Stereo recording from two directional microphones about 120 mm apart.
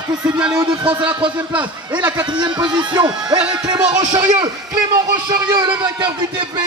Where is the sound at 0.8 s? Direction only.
10° right (ahead or behind).